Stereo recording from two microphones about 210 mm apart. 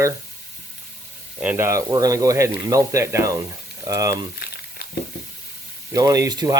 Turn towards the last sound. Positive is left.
turn(degrees=-15)  # may be behind; listen again after turning